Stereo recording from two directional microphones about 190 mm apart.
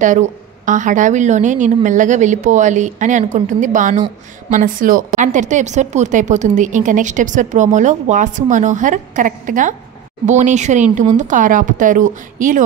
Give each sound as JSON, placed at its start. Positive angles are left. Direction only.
{"t": 0.0, "sound": "a woman's voice", "side_deg": -40}